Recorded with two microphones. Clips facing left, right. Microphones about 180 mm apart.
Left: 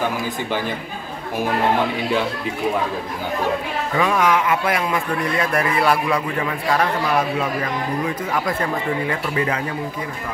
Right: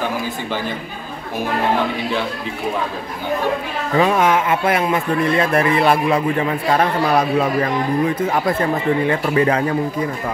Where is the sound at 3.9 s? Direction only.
30° right (ahead or behind).